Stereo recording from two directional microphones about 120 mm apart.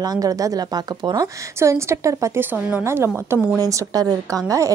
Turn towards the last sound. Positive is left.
turn(degrees=-25)  # may be behind; listen again after turning